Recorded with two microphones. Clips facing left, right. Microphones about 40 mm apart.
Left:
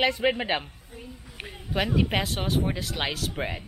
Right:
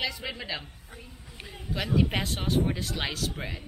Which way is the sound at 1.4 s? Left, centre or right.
Left.